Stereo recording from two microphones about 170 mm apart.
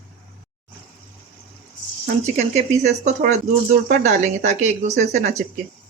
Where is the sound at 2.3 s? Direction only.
40° right (ahead or behind).